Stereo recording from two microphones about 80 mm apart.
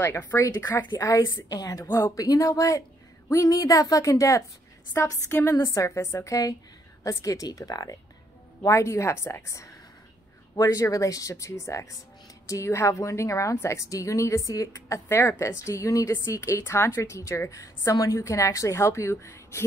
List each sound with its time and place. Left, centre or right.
0.0 s a woman's voice: left
0.9 s speech: left
1.9 s a woman's voice: left
2.1 s a woman's voice: left
8.6 s a woman's voice: left